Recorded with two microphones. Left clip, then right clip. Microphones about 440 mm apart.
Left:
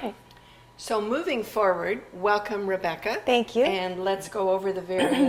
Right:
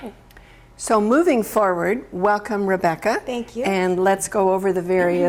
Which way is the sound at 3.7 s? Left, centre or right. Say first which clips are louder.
Right 8 dB; right.